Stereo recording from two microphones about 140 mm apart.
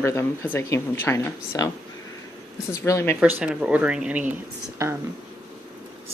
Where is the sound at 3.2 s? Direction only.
5° right (ahead or behind).